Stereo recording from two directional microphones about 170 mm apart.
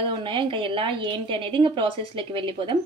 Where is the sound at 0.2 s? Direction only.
30° right (ahead or behind).